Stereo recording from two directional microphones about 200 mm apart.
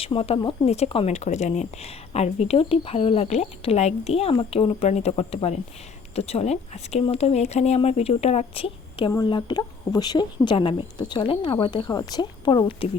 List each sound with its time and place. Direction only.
0.0 s speech: 30° left (ahead or behind)